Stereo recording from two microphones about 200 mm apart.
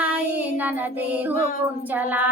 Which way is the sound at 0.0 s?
5° right (ahead or behind).